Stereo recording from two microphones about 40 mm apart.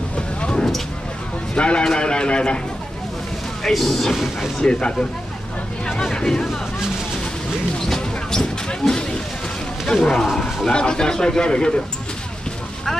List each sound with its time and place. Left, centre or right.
0.4 s vehicle: left
1.5 s a man's voice: left
3.6 s speech: centre
4.6 s a man's voice: left
6.1 s speech: centre
7.9 s a sound: centre
8.6 s speech: centre
10.7 s a man's voice: left